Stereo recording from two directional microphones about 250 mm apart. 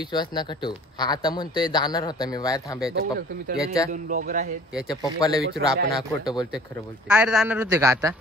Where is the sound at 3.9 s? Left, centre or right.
Right.